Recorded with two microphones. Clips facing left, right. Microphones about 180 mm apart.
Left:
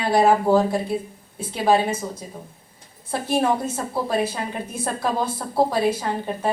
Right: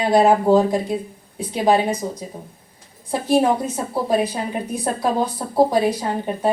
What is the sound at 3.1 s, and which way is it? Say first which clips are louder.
A woman's voice: right 4 dB; 15° right (ahead or behind).